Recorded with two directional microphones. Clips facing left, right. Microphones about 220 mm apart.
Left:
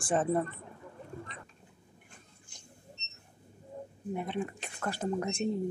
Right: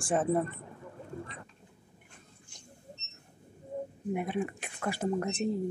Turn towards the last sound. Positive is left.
turn(degrees=-5)  # may be behind; listen again after turning